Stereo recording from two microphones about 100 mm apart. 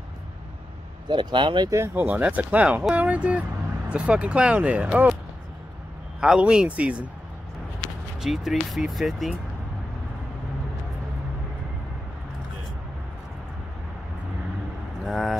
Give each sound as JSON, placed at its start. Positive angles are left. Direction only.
{"t": 1.0, "sound": "speech", "side_deg": -50}
{"t": 2.0, "sound": "speech", "side_deg": -15}
{"t": 6.2, "sound": "speech", "side_deg": -10}
{"t": 8.2, "sound": "speech", "side_deg": 0}
{"t": 15.0, "sound": "speech", "side_deg": 0}